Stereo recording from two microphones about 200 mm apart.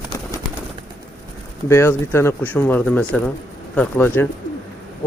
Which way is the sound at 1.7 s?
10° left (ahead or behind).